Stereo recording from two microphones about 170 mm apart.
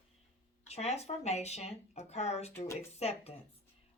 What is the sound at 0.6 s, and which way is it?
Speech, 40° left (ahead or behind).